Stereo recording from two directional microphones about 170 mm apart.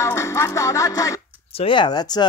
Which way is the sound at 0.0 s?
15° left (ahead or behind).